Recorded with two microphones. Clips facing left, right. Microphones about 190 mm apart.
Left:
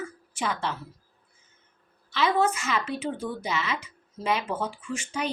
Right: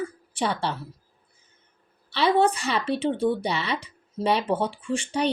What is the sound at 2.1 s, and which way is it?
Speech, 35° right (ahead or behind).